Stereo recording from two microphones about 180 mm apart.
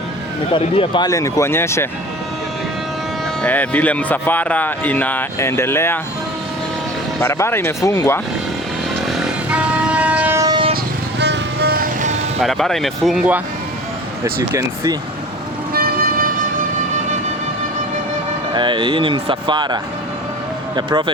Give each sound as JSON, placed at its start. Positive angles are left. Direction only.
{"t": 0.5, "sound": "speech", "side_deg": 30}
{"t": 3.4, "sound": "speech", "side_deg": 10}
{"t": 7.2, "sound": "speech", "side_deg": 15}
{"t": 9.0, "sound": "vehicle", "side_deg": 0}
{"t": 11.2, "sound": "music", "side_deg": -65}
{"t": 12.4, "sound": "speech", "side_deg": 0}
{"t": 15.7, "sound": "music", "side_deg": -55}
{"t": 18.5, "sound": "speech", "side_deg": -25}